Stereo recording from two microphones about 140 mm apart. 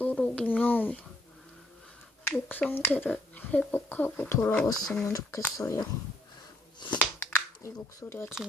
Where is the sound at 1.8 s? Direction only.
5° left (ahead or behind).